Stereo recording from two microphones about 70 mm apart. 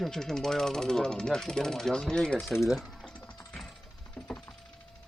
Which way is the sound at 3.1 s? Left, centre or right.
Centre.